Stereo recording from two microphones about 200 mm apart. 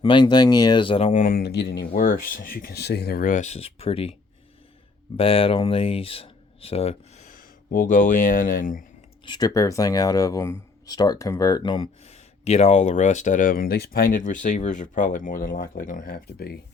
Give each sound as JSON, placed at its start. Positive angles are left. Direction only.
{"t": 0.0, "sound": "speech", "side_deg": 25}
{"t": 5.1, "sound": "speech", "side_deg": 30}
{"t": 9.2, "sound": "speech", "side_deg": 20}